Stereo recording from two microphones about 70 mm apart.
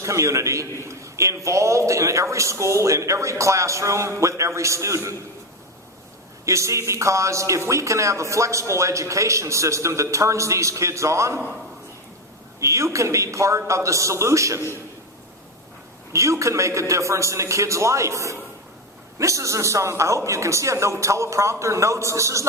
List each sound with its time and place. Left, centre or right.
0.0 s a man's voice: right
6.4 s a man's voice: right
12.5 s a man's voice: right
16.1 s a man's voice: right